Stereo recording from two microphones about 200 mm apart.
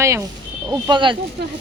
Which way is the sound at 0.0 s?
15° right (ahead or behind).